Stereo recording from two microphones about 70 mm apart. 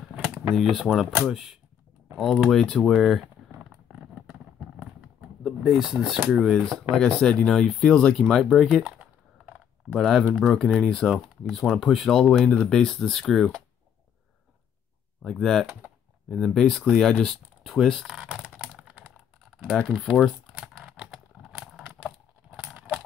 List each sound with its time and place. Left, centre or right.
0.6 s speech: centre
3.5 s a sound: centre
5.7 s speech: centre
9.9 s speech: centre
15.3 s speech: centre
18.0 s speech: centre
18.7 s computer keyboard: centre
19.9 s speech: centre
20.6 s computer keyboard: centre
21.4 s a sound: centre